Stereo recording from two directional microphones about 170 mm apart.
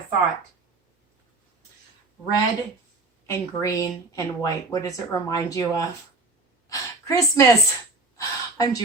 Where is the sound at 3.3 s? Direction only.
20° left (ahead or behind).